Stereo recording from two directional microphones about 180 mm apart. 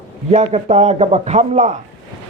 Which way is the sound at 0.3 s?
35° right (ahead or behind).